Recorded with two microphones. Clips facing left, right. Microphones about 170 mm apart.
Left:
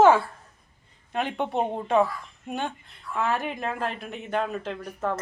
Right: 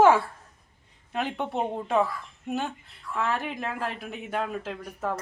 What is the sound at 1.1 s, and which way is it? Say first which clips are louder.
Speech: left 2 dB; centre (ahead or behind).